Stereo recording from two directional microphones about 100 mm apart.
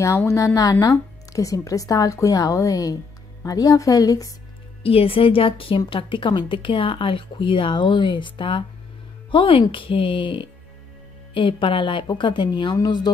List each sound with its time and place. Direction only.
0.3 s a woman's voice: 30° left (ahead or behind)
4.8 s speech: 70° left (ahead or behind); by 13.1 s 45° left (ahead or behind)